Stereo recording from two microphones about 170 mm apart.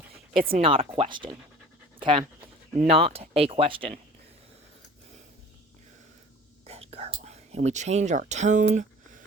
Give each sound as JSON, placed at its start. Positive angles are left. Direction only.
{"t": 0.3, "sound": "speech", "side_deg": -35}
{"t": 6.7, "sound": "whispering", "side_deg": -40}
{"t": 8.3, "sound": "speech", "side_deg": -45}